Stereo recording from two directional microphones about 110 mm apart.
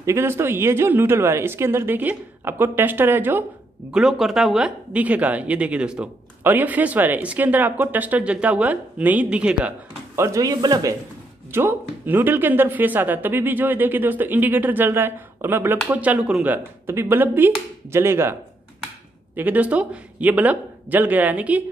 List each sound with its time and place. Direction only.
0.0 s speech: 25° right (ahead or behind)
3.9 s speech: 5° right (ahead or behind)
10.1 s speech: 25° right (ahead or behind)
11.5 s speech: 20° right (ahead or behind)
19.3 s speech: 15° right (ahead or behind)